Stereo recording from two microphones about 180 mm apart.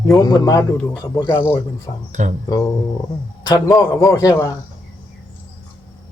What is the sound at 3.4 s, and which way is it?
A man's voice, 20° left (ahead or behind).